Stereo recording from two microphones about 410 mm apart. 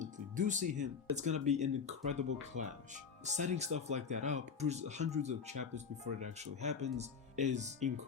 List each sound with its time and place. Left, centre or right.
0.0 s speech: centre